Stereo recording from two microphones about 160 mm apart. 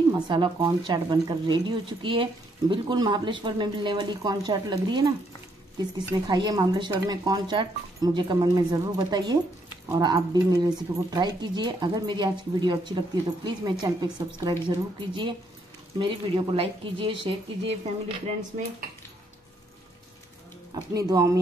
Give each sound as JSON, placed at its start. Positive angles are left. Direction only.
{"t": 0.1, "sound": "speech", "side_deg": -30}
{"t": 20.7, "sound": "speech", "side_deg": -25}